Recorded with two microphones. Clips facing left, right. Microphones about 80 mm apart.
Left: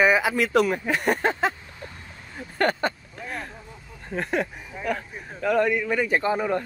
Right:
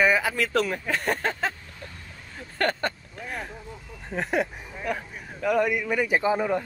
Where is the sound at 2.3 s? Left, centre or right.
Centre.